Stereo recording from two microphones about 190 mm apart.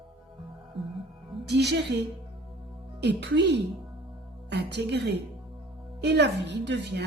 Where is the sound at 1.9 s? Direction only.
60° right (ahead or behind).